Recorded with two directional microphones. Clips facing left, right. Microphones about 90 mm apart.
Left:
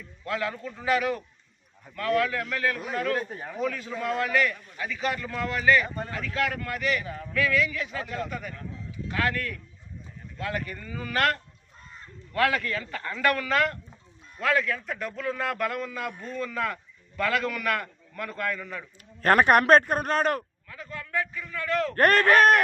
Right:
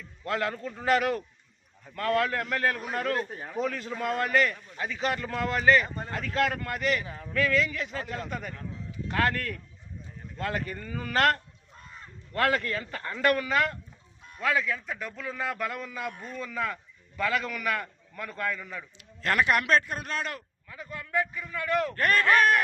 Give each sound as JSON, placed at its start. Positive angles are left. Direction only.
{"t": 0.3, "sound": "a man's voice", "side_deg": -45}
{"t": 7.0, "sound": "speech", "side_deg": -20}
{"t": 7.3, "sound": "a man's voice", "side_deg": -40}
{"t": 13.5, "sound": "a man's voice", "side_deg": -5}
{"t": 19.2, "sound": "a man's voice", "side_deg": 50}
{"t": 20.7, "sound": "a man's voice", "side_deg": -15}
{"t": 21.9, "sound": "speech", "side_deg": 55}